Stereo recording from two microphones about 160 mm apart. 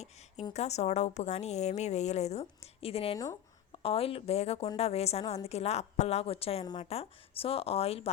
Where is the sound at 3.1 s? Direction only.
20° left (ahead or behind).